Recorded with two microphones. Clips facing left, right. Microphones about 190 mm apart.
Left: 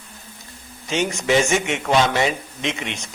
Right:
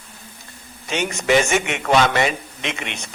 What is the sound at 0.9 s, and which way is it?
A man's voice, 60° right (ahead or behind).